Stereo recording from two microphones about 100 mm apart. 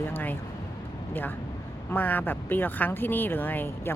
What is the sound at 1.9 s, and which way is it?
Speech, 20° left (ahead or behind).